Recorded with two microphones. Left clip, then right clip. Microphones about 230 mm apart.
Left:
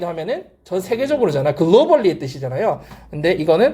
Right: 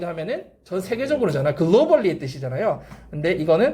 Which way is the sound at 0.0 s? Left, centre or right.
Centre.